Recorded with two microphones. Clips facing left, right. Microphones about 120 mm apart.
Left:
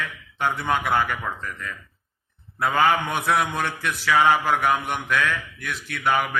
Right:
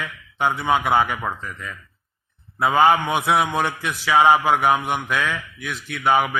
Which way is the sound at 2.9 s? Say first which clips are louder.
Right 3 dB; centre (ahead or behind).